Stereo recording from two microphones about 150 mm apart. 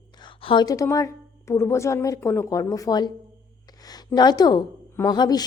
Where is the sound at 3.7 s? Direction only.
25° left (ahead or behind).